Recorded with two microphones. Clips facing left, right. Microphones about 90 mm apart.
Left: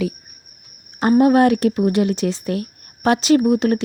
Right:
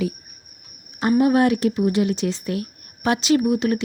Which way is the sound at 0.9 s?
45° left (ahead or behind).